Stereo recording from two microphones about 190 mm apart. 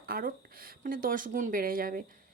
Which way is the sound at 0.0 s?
50° right (ahead or behind).